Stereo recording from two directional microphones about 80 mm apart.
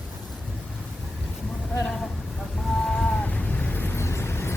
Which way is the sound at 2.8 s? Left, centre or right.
Centre.